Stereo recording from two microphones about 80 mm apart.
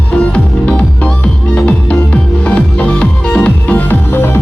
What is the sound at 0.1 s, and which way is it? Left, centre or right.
Music, centre.